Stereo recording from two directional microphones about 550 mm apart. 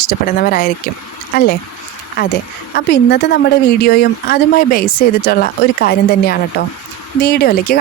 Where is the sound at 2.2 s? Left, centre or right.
Centre.